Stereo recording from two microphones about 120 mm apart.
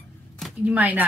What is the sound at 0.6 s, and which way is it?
Speech, 15° right (ahead or behind).